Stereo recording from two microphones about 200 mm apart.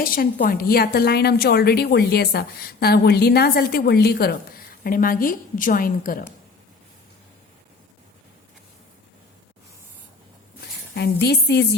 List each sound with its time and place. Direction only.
0.0 s a woman's voice: 45° left (ahead or behind)
10.9 s a woman's voice: 55° left (ahead or behind)